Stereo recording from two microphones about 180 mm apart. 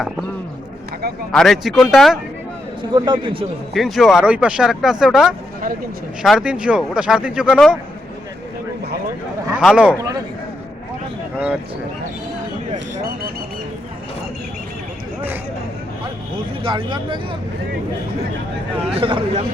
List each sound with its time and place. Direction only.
1.3 s speech: centre (ahead or behind)
2.9 s speech: 25° right (ahead or behind)
3.8 s speech: centre (ahead or behind)
9.6 s speech: 5° right (ahead or behind)
10.0 s speech: 20° right (ahead or behind)
16.6 s speech: 25° right (ahead or behind)
18.9 s a man's voice: 30° right (ahead or behind)